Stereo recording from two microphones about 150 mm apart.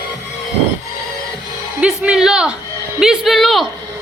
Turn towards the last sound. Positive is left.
turn(degrees=0)  # may be behind; listen again after turning